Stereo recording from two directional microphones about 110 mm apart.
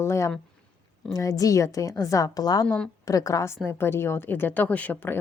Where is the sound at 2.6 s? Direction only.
10° left (ahead or behind).